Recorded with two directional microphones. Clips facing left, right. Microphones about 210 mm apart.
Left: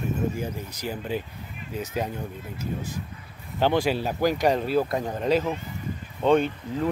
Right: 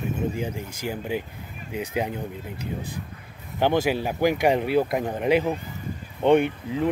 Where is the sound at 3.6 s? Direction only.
15° right (ahead or behind).